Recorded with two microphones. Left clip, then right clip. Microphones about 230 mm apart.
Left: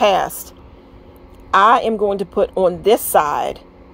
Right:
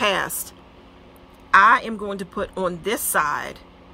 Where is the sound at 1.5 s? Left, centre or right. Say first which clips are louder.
Left 3 dB; right.